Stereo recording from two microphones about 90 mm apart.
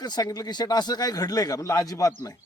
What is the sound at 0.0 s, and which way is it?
Speech, 45° left (ahead or behind).